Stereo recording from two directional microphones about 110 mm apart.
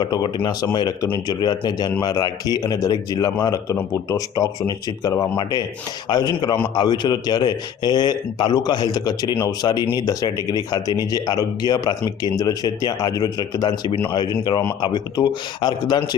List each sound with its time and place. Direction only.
0.0 s a man's voice: 45° left (ahead or behind)